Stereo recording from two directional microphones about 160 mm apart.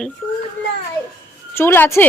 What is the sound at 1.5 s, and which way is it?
Speech, 15° left (ahead or behind).